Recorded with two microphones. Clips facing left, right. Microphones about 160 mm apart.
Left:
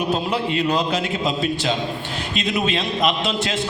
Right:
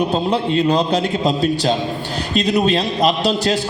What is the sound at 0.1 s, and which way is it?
A man's voice, 30° right (ahead or behind).